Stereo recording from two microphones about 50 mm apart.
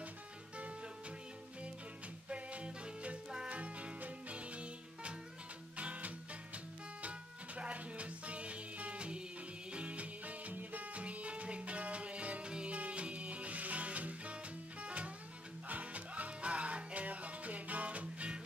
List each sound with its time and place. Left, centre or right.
2.2 s music: right